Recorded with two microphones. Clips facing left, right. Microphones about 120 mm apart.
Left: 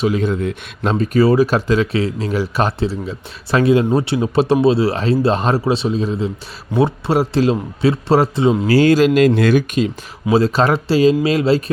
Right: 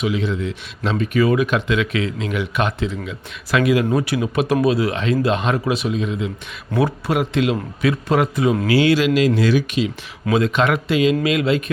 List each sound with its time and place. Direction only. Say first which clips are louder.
0.0 s a man's voice: left 4 dB; 45° left (ahead or behind); by 8.5 s 30° left (ahead or behind)
8.6 s speech: left 5 dB; 40° left (ahead or behind)
10.3 s speech: left 3 dB; 35° left (ahead or behind)